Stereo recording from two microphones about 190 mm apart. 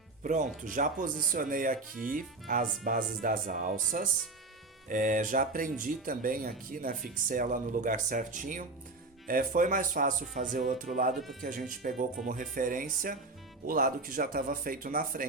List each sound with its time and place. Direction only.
0.2 s speech: 40° right (ahead or behind)
11.2 s speech: centre (ahead or behind)
11.7 s speech: 45° right (ahead or behind)